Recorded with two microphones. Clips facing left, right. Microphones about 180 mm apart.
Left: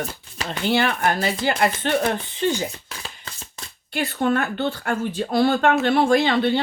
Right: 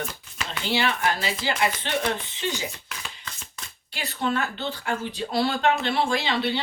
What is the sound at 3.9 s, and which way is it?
Speech, 50° left (ahead or behind).